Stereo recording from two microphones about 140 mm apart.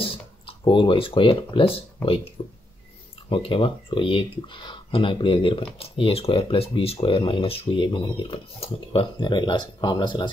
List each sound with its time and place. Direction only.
0.0 s speech: 40° left (ahead or behind)